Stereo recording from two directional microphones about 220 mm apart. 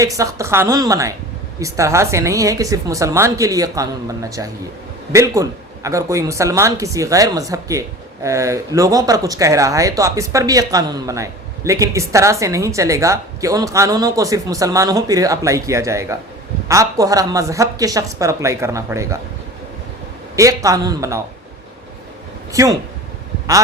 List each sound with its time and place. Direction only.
0.0 s a man's voice: 15° right (ahead or behind)
20.3 s a man's voice: 15° right (ahead or behind)
22.5 s a man's voice: 15° right (ahead or behind)